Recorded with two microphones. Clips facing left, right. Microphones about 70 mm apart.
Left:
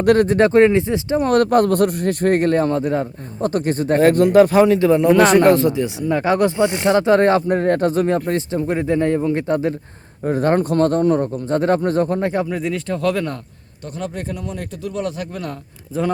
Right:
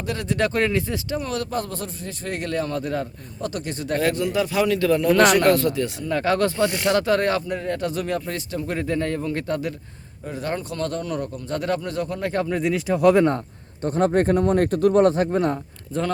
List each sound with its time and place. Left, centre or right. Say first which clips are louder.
0.0 s speech: left 15 dB; left
0.3 s speech: left 9 dB; left
1.2 s speech: left 12 dB; left
4.1 s speech: left 11 dB; left
4.6 s speech: left 6 dB; left
7.5 s speech: left 9 dB; left
10.2 s speech: left 11 dB; left
12.5 s speech: even; centre
13.0 s speech: right 7 dB; centre
13.8 s speech: right 8 dB; right
15.9 s speech: left 4 dB; centre